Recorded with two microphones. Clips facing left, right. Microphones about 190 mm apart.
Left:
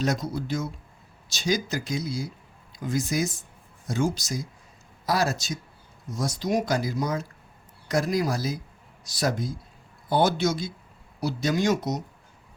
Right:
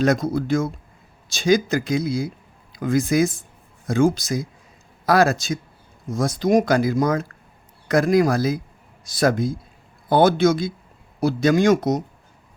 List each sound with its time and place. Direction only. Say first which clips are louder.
0.0 s speech: right 8 dB; 55° right (ahead or behind)